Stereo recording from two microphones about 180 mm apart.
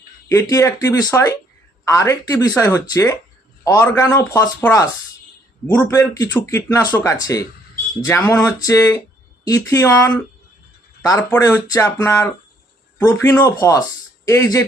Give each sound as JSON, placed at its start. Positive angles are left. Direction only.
{"t": 0.3, "sound": "speech", "side_deg": 15}
{"t": 5.9, "sound": "speech", "side_deg": 15}